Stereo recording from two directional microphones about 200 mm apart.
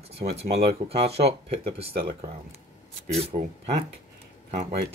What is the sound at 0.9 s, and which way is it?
Speech, 30° right (ahead or behind).